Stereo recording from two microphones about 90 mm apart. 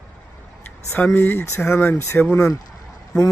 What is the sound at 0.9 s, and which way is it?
Speech, 25° left (ahead or behind).